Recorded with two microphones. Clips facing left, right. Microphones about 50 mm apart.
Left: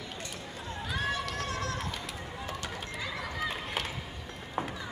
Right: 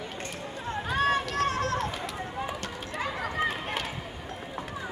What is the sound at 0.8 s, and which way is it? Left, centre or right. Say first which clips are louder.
Run: right 7 dB; right.